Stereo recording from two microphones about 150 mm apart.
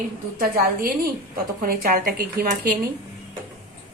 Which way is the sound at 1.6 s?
80° right.